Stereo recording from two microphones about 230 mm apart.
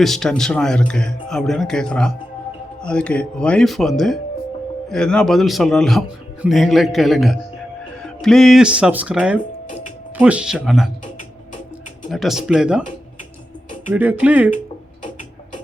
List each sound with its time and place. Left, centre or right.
0.0 s a man's voice: centre
9.6 s music: left
10.2 s a man's voice: centre
12.1 s a man's voice: centre
13.9 s speech: centre